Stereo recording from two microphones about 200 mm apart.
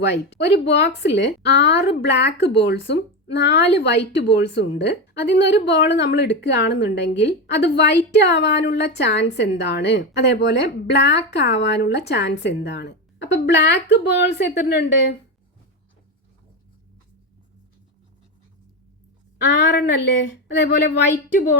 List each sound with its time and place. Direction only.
0.0 s speech: 60° left (ahead or behind)
19.4 s speech: 60° left (ahead or behind)